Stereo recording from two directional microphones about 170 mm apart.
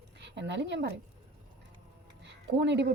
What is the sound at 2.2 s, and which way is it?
Music, 90° right.